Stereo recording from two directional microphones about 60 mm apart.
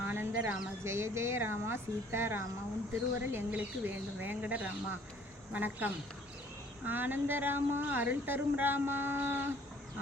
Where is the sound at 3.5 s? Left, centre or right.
Right.